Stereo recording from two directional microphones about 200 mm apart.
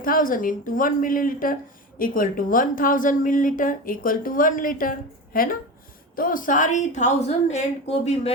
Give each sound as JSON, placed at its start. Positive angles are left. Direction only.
{"t": 0.0, "sound": "a woman's voice", "side_deg": 45}